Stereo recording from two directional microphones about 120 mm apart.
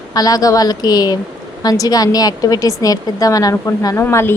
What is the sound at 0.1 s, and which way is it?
A woman's voice, 30° left (ahead or behind).